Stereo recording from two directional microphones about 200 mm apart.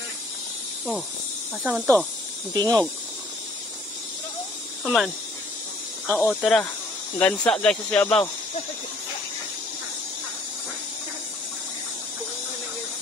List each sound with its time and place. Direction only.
1.6 s speech: 10° right (ahead or behind)
2.6 s speech: 20° right (ahead or behind)
4.8 s speech: centre (ahead or behind)